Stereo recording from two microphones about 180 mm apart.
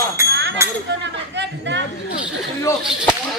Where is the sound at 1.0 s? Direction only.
80° right.